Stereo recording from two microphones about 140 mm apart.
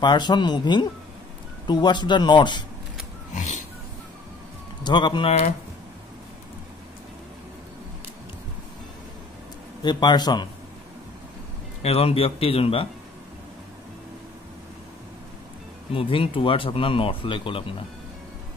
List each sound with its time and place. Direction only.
0.0 s speech: 30° left (ahead or behind)
3.3 s a sound: 60° left (ahead or behind)
4.8 s speech: 35° left (ahead or behind)
9.8 s speech: 30° left (ahead or behind)
11.8 s a man's voice: 45° left (ahead or behind)
15.9 s speech: 40° left (ahead or behind)